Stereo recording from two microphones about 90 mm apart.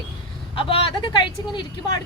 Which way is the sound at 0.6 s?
80° left.